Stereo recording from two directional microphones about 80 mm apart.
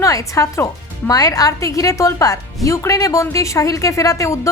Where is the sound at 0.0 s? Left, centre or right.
Left.